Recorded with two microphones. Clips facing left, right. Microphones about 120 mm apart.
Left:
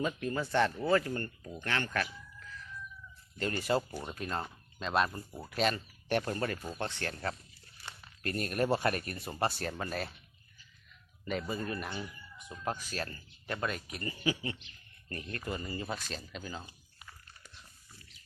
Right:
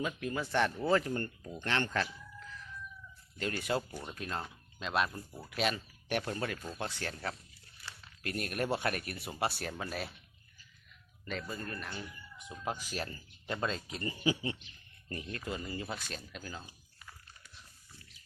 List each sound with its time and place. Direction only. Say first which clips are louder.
0.3 s speech: left 1 dB; 15° right (ahead or behind)
3.3 s speech: left 3 dB; 5° right (ahead or behind)
11.3 s speech: left 5 dB; 5° left (ahead or behind)
12.9 s speech: even; 20° right (ahead or behind)
15.3 s speech: left 2 dB; 5° right (ahead or behind)